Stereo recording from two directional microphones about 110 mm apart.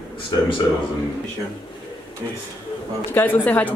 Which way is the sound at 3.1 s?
15° left (ahead or behind).